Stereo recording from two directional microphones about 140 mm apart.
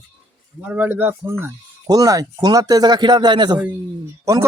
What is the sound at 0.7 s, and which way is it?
Speech, 15° right (ahead or behind).